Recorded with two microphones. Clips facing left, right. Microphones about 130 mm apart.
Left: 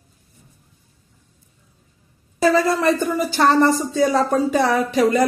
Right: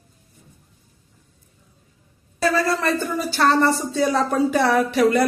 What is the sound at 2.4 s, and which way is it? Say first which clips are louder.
A woman's voice: left 4 dB; 15° left (ahead or behind).